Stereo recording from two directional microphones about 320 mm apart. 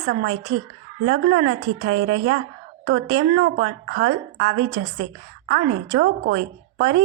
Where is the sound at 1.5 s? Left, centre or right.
Right.